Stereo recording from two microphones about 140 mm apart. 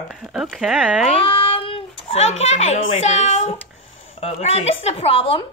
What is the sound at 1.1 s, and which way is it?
A child's voice, 40° left (ahead or behind).